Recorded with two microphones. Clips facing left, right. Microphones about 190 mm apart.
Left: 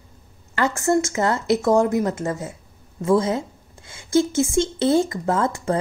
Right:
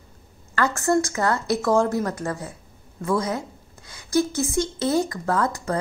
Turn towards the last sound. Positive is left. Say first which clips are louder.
# left 2 dB
turn(degrees=25)  # may be behind; listen again after turning